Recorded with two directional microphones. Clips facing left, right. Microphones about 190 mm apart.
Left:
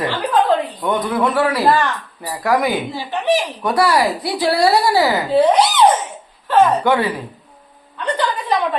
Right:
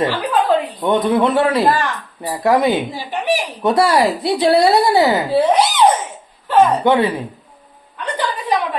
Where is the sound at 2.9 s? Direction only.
10° right (ahead or behind).